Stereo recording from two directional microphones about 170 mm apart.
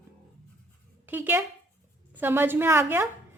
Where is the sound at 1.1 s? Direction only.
10° right (ahead or behind).